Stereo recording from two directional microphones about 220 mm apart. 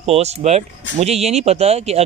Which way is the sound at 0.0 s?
30° right (ahead or behind).